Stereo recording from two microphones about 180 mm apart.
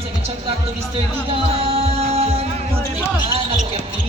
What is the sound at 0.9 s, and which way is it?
Speech, 30° right (ahead or behind).